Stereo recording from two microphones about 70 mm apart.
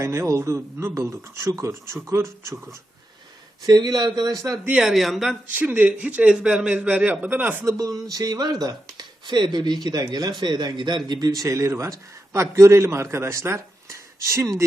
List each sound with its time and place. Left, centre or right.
0.0 s speech: right
3.6 s speech: right
4.8 s speech: centre
5.5 s a man's voice: right
7.6 s speech: right
9.0 s speech: right
11.4 s a man's voice: right